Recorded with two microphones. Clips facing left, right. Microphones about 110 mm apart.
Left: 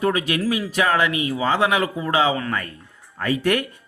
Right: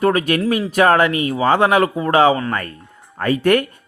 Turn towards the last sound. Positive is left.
turn(degrees=-50)  # may be behind; listen again after turning